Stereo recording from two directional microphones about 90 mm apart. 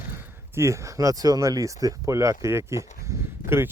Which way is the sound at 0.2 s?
30° right (ahead or behind).